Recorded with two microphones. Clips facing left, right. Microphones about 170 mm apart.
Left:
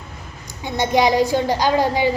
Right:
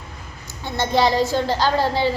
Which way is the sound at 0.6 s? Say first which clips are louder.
Left 2 dB; 15° left (ahead or behind).